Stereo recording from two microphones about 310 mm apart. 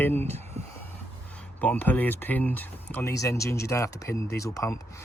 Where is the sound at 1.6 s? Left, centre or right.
Centre.